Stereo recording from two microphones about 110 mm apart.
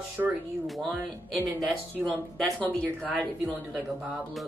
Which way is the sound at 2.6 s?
15° left (ahead or behind).